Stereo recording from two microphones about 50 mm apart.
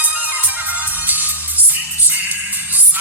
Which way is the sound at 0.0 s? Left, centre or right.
Right.